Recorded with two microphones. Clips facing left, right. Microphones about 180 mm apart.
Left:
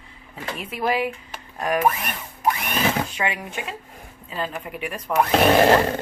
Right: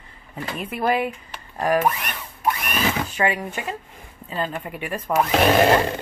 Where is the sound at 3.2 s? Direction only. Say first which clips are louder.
Right 4 dB; centre (ahead or behind).